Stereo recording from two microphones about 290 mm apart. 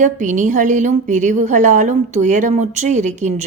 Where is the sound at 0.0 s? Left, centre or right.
Right.